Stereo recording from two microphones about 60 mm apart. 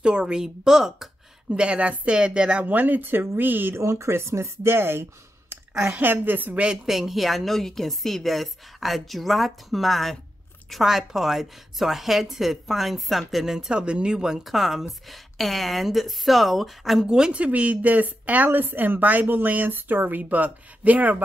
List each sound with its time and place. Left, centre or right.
0.0 s a woman's voice: centre; by 6.6 s right
6.9 s a woman's voice: centre
17.0 s speech: centre